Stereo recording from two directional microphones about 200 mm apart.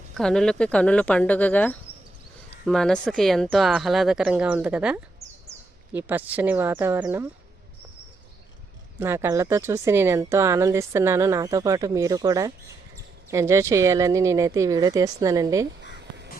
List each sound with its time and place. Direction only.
0.2 s speech: 5° left (ahead or behind)
9.0 s speech: 10° right (ahead or behind)